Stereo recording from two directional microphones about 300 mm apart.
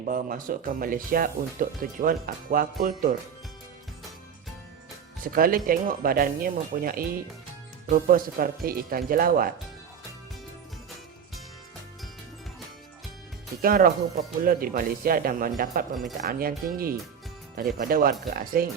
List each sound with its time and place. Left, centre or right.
0.0 s speech: right
5.2 s speech: right
13.6 s speech: right